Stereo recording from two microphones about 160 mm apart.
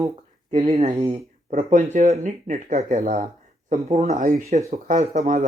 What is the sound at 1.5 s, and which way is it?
Speech, 50° right (ahead or behind).